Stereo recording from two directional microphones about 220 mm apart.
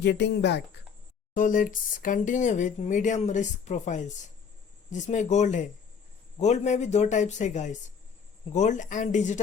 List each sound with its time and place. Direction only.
0.0 s speech: 50° left (ahead or behind)
1.3 s speech: 35° left (ahead or behind)